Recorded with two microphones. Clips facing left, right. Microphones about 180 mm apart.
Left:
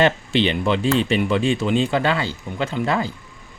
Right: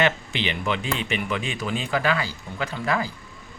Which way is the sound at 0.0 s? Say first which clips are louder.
Left 6 dB; 30° left (ahead or behind).